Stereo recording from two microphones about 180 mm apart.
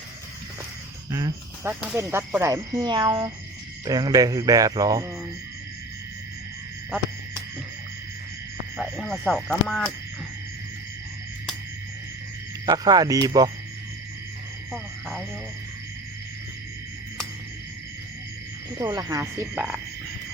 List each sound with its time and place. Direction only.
1.1 s speech: 20° right (ahead or behind)
8.8 s a sound: centre (ahead or behind)
12.6 s speech: 20° right (ahead or behind)
18.8 s frog: 20° right (ahead or behind)